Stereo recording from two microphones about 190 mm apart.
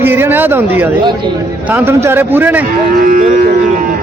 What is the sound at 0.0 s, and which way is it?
Speech, 10° right (ahead or behind).